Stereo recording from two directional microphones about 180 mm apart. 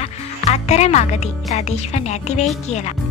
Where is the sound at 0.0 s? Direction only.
35° left (ahead or behind).